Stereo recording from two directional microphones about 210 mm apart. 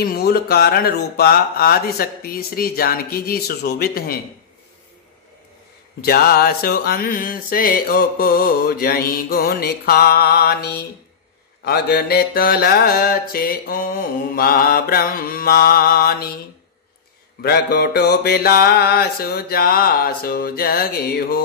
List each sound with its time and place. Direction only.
0.0 s music: 50° left (ahead or behind)
5.9 s music: 45° left (ahead or behind)
17.4 s music: 50° left (ahead or behind)